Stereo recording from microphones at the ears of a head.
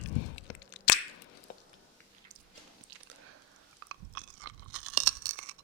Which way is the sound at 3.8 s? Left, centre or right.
Right.